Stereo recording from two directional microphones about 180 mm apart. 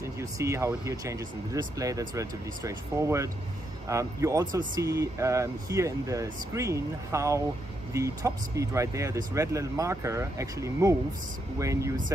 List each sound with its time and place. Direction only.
0.0 s speech: 15° right (ahead or behind)